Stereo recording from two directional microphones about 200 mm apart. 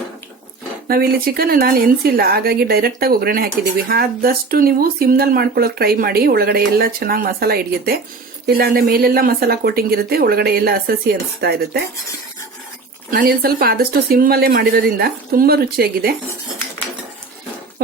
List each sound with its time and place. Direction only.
0.9 s a woman's voice: 50° right (ahead or behind)
13.1 s a woman's voice: 45° right (ahead or behind)